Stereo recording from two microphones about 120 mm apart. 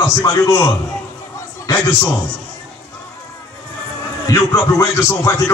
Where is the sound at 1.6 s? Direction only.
25° left (ahead or behind).